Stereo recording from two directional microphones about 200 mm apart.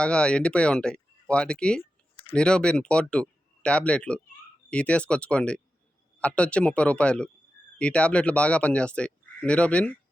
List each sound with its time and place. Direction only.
0.0 s speech: 5° left (ahead or behind)
1.8 s a sound: 30° left (ahead or behind)
2.3 s speech: 5° left (ahead or behind)